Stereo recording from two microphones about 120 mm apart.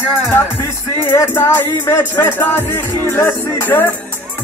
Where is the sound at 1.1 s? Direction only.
20° left (ahead or behind).